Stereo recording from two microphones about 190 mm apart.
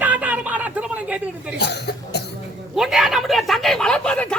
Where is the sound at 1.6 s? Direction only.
60° left (ahead or behind).